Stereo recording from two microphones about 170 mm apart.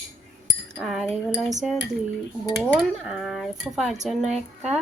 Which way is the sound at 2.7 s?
5° right (ahead or behind).